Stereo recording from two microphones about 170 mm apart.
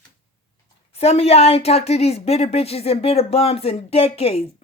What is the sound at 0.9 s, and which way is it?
A woman's voice, 35° left (ahead or behind).